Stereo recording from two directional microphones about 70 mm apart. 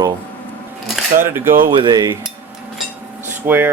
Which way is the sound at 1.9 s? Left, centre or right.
Right.